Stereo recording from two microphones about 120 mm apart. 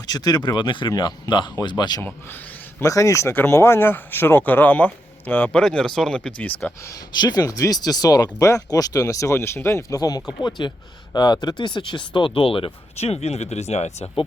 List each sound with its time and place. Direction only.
0.1 s speech: 35° left (ahead or behind)
2.0 s speech: 15° left (ahead or behind)
2.8 s speech: 25° left (ahead or behind)
6.9 s speech: 35° left (ahead or behind); by 14.3 s 60° left (ahead or behind)